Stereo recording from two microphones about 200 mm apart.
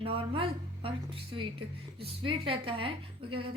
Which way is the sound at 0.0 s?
30° right (ahead or behind).